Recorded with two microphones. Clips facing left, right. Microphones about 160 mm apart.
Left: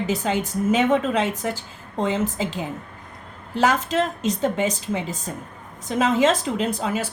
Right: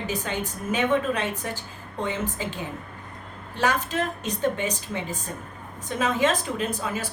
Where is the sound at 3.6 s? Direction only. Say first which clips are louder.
Left 5 dB; 90° left.